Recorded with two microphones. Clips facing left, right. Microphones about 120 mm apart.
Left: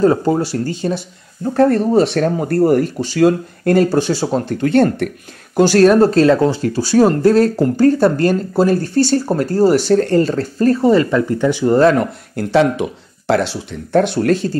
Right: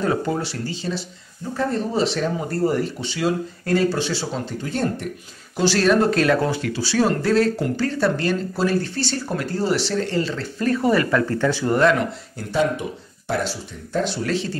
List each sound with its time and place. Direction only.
0.0 s speech: 35° left (ahead or behind)
4.6 s speech: 65° left (ahead or behind)
5.6 s speech: 50° left (ahead or behind); by 6.6 s 25° left (ahead or behind)
6.6 s speech: 45° left (ahead or behind); by 11.7 s 15° left (ahead or behind)
11.7 s speech: 40° left (ahead or behind)
12.4 s speech: 80° left; by 14.6 s 45° left (ahead or behind)